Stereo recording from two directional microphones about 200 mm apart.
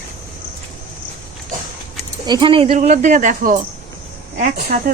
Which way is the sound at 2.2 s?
20° right (ahead or behind).